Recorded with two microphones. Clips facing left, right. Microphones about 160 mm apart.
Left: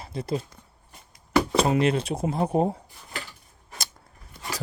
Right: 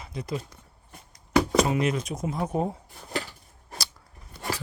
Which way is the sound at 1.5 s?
30° left (ahead or behind).